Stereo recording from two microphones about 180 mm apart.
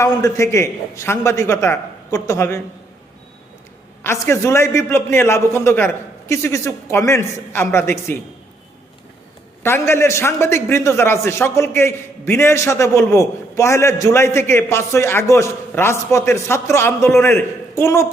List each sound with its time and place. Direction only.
0.0 s a man's voice: 15° left (ahead or behind)
4.0 s a man's voice: 15° left (ahead or behind)
9.6 s a man's voice: 15° left (ahead or behind)